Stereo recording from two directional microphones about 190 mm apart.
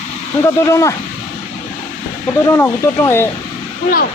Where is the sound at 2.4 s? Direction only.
15° left (ahead or behind).